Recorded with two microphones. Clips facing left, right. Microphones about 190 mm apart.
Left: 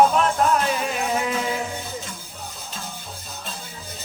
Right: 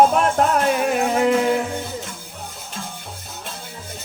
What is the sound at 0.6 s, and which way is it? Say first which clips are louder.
Music: right 6 dB; 55° right (ahead or behind).